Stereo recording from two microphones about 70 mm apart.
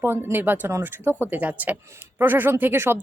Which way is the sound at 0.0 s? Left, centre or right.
Right.